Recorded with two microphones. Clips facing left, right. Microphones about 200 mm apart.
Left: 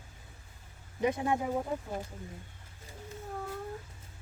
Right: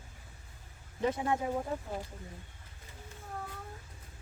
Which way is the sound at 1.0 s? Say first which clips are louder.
Left 2 dB; 15° left (ahead or behind).